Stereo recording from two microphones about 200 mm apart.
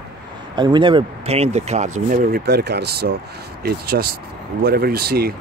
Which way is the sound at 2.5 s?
55° right (ahead or behind).